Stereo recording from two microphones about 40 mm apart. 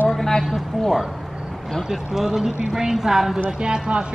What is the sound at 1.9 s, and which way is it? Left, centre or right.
A woman's voice, centre.